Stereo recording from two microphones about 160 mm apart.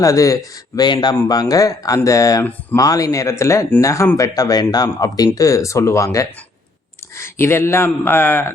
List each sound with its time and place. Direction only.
0.0 s speech: 20° left (ahead or behind)
2.8 s speech: 20° left (ahead or behind)